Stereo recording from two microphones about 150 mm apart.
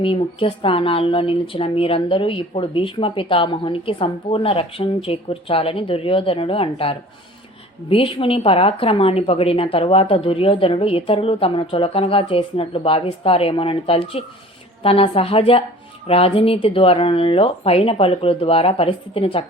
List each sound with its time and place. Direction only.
0.0 s speech: 35° left (ahead or behind)